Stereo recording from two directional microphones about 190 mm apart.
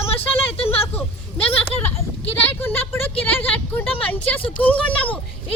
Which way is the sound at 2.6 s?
10° left (ahead or behind).